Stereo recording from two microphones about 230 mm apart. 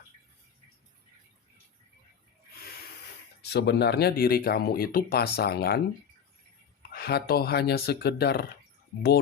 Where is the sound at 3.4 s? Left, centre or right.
Left.